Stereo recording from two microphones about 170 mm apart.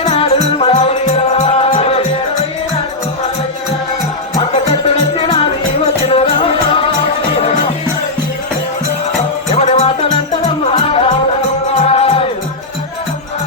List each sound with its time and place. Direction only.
0.0 s music: 35° left (ahead or behind)
4.4 s music: 30° left (ahead or behind)
9.5 s music: 35° left (ahead or behind)